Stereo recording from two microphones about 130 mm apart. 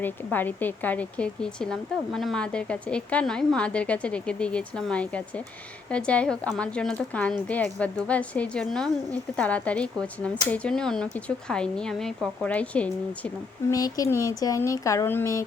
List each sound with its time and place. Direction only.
0.0 s a woman's voice: 15° left (ahead or behind)
13.7 s speech: 30° left (ahead or behind)